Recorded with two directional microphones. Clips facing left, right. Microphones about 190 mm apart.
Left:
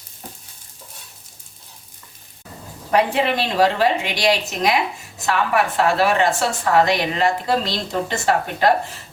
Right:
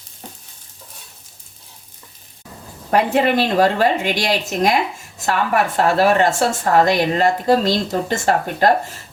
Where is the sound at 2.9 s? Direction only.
50° right (ahead or behind).